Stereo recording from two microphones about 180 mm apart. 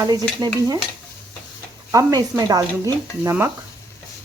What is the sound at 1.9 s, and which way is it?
Speech, 20° right (ahead or behind).